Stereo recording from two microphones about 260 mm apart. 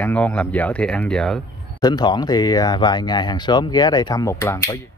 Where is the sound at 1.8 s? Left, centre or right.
Centre.